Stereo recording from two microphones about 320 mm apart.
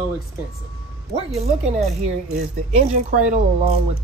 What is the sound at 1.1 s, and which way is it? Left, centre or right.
A woman's voice, centre.